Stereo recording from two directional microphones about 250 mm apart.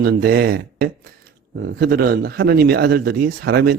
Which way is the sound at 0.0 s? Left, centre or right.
Right.